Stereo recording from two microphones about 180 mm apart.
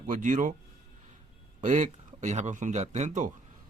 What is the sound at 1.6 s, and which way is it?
Speech, 45° right (ahead or behind).